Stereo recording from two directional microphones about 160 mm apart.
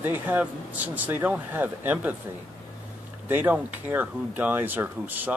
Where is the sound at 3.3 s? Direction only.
10° right (ahead or behind).